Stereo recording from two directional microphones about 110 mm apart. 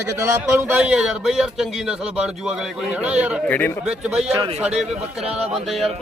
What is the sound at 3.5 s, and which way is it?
Speech, 15° left (ahead or behind).